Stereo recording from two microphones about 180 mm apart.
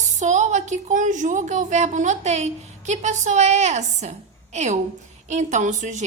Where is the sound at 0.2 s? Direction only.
40° right (ahead or behind).